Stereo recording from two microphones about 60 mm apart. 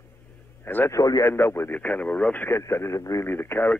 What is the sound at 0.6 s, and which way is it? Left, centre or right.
Speech, left.